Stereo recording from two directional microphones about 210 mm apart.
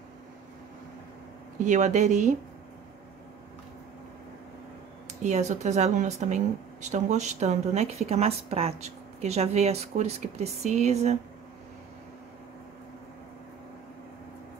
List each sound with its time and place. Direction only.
1.6 s a woman's voice: 35° right (ahead or behind)
5.2 s a woman's voice: 35° right (ahead or behind)